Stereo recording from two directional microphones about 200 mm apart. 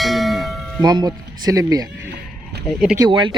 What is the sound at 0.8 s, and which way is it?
Speech, 20° right (ahead or behind).